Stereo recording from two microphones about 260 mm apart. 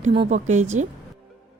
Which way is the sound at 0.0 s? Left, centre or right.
Right.